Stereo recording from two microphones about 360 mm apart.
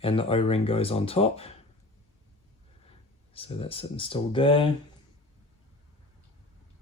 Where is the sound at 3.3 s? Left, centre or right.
Centre.